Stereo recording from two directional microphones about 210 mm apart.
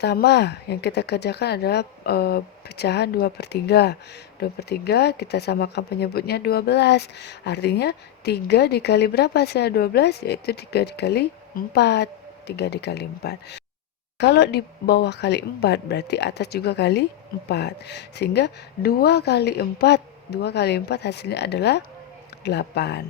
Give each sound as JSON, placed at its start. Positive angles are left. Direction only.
{"t": 0.0, "sound": "speech", "side_deg": 50}